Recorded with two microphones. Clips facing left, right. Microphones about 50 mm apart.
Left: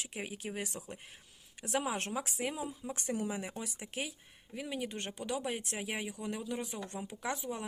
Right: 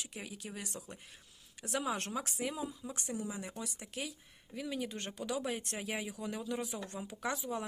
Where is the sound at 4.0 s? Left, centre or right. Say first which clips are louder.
Left 2 dB; centre.